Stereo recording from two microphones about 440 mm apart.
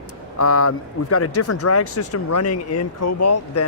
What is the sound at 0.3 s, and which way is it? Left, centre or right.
Speech, left.